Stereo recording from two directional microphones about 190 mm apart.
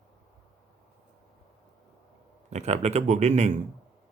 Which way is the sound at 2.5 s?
35° right (ahead or behind).